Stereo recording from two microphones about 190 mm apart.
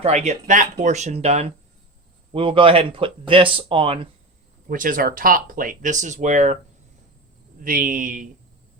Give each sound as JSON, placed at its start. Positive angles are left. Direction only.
{"t": 0.0, "sound": "speech", "side_deg": -35}
{"t": 4.7, "sound": "speech", "side_deg": -45}
{"t": 7.6, "sound": "speech", "side_deg": -45}